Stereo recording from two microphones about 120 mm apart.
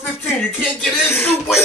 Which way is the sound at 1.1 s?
20° left (ahead or behind).